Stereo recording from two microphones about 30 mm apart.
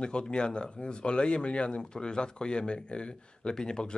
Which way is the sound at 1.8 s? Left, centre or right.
Left.